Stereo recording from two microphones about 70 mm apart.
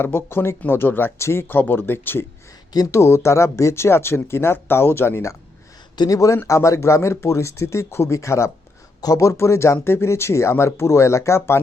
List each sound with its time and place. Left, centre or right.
0.0 s speech: left
2.9 s speech: left
6.0 s speech: left
9.0 s speech: left